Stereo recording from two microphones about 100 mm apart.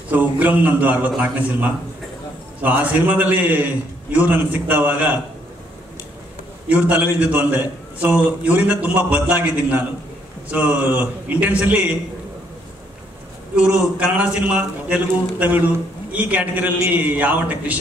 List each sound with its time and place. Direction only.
0.1 s a man's voice: 15° right (ahead or behind)
6.7 s a man's voice: 15° right (ahead or behind)
13.6 s a man's voice: 10° right (ahead or behind)